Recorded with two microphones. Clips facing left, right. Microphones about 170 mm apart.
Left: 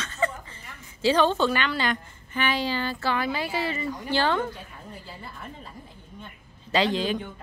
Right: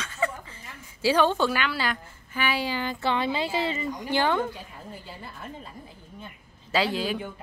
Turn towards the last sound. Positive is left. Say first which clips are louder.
# left 2 dB
turn(degrees=-5)  # may be behind; listen again after turning